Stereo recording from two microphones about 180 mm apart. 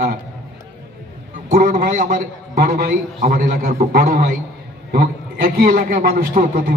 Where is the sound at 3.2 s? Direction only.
50° right (ahead or behind).